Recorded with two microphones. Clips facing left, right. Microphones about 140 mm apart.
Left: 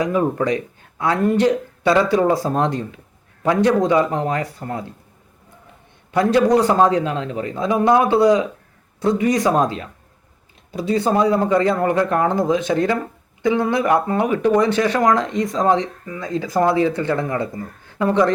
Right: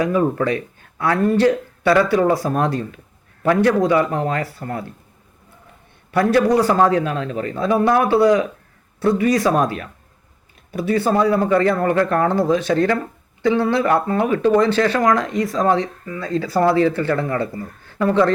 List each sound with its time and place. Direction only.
0.0 s speech: 20° left (ahead or behind)
6.1 s speech: 20° left (ahead or behind)